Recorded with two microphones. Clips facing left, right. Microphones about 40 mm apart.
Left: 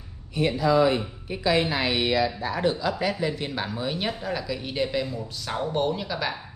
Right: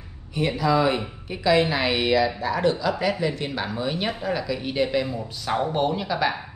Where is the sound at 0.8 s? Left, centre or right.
Right.